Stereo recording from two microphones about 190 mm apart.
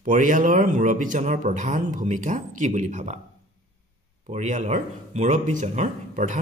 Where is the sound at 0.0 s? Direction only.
45° right (ahead or behind).